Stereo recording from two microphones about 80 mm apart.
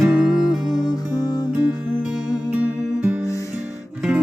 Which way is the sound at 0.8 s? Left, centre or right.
Left.